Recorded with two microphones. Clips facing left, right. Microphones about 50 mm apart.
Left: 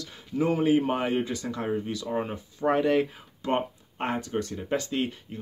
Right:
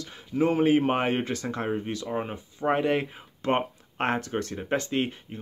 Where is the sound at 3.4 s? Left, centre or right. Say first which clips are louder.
Right 2 dB; right.